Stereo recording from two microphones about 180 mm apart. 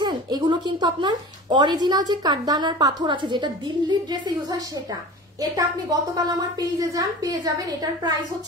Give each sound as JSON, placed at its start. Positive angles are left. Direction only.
{"t": 0.0, "sound": "a woman's voice", "side_deg": -25}